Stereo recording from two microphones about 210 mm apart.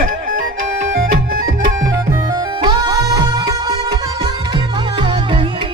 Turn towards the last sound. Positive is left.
turn(degrees=-25)  # may be behind; listen again after turning